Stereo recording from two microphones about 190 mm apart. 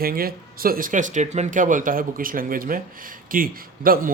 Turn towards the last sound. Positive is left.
turn(degrees=-50)  # may be behind; listen again after turning